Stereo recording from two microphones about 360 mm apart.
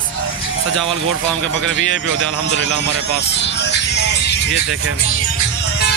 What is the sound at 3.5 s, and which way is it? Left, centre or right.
Music, left.